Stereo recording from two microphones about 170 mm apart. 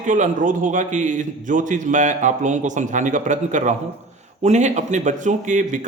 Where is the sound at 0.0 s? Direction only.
45° right (ahead or behind).